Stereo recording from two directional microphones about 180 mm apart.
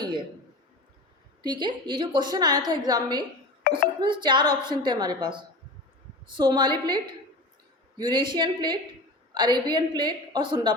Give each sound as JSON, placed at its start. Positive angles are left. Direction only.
{"t": 1.4, "sound": "a woman's voice", "side_deg": -25}
{"t": 3.6, "sound": "music", "side_deg": 60}
{"t": 4.0, "sound": "a woman's voice", "side_deg": -25}